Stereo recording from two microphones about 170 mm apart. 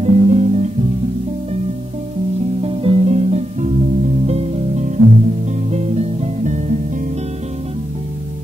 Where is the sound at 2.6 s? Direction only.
35° right (ahead or behind).